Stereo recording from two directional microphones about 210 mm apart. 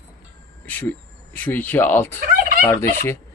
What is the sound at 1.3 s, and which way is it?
Speech, 10° left (ahead or behind).